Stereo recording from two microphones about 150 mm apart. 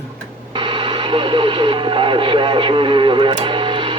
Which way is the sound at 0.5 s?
35° right (ahead or behind).